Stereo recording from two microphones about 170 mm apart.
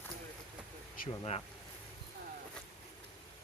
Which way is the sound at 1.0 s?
55° left (ahead or behind).